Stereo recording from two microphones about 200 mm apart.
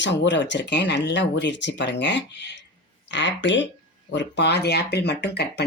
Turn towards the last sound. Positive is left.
turn(degrees=60)  # may be behind; listen again after turning